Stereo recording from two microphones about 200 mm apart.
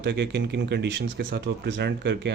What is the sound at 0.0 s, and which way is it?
Speech, 55° right (ahead or behind).